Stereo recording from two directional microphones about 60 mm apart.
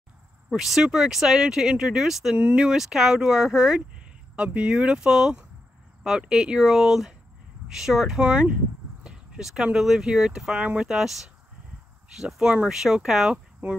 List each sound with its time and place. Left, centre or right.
0.5 s speech: centre
2.3 s speech: right
8.2 s speech: centre
9.0 s a sound: centre
9.4 s speech: centre